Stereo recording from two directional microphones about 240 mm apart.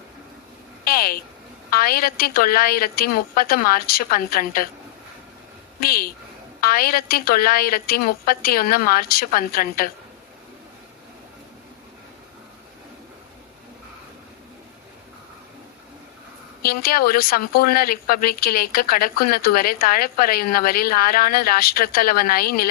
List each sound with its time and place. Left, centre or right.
0.9 s a sound: left
1.7 s speech: left
5.8 s speech: left
16.6 s speech: left